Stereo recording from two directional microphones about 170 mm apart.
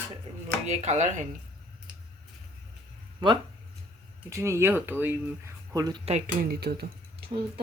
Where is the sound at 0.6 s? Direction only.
40° right (ahead or behind).